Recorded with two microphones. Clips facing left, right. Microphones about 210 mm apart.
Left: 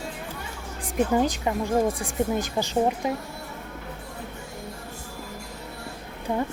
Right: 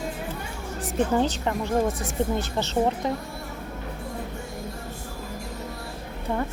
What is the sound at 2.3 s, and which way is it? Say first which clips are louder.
Speech: left 1 dB; 15° left (ahead or behind).